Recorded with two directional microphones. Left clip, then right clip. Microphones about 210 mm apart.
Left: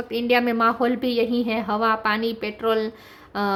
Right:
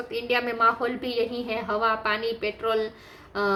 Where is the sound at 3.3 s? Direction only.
40° left (ahead or behind).